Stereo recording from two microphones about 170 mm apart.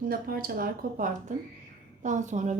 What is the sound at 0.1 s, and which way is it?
A woman's voice, 60° right (ahead or behind).